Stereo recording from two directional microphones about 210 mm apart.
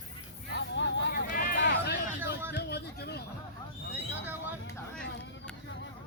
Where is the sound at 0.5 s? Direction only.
60° left (ahead or behind).